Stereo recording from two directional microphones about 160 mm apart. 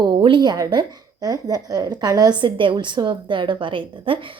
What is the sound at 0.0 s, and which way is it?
A woman's voice, 30° right (ahead or behind).